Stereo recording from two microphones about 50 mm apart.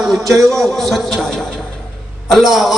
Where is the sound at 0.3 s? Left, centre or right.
Right.